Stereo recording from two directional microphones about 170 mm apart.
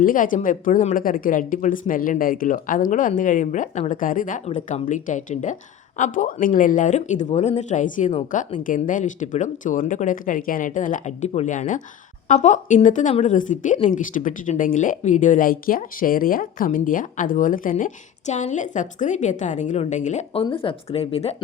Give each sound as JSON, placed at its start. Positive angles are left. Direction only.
{"t": 0.0, "sound": "speech", "side_deg": 55}